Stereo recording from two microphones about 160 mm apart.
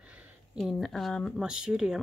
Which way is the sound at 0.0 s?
10° right (ahead or behind).